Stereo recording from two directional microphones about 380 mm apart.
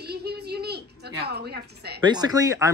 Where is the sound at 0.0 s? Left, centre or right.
Right.